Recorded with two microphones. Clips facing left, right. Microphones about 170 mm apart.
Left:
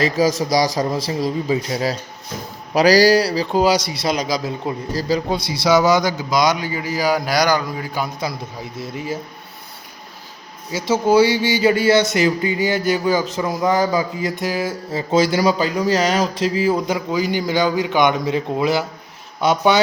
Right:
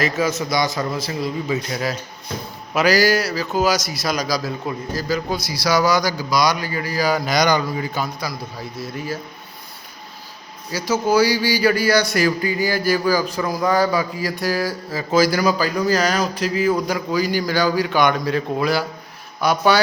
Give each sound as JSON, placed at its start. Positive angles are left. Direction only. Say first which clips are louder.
{"t": 0.0, "sound": "a man's voice", "louder": "left 3 dB", "side_deg": 35}
{"t": 8.0, "sound": "speech", "louder": "left 2 dB", "side_deg": 25}
{"t": 10.7, "sound": "speech", "louder": "left 3 dB", "side_deg": 25}